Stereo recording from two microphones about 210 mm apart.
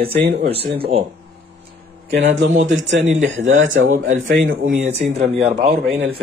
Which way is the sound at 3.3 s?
65° right (ahead or behind).